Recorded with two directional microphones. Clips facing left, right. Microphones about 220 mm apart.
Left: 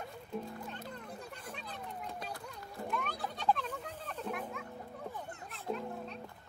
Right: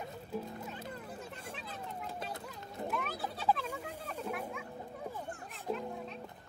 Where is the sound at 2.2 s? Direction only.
20° right (ahead or behind).